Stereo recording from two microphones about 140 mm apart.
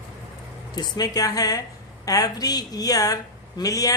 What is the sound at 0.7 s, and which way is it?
A woman's voice, 30° left (ahead or behind).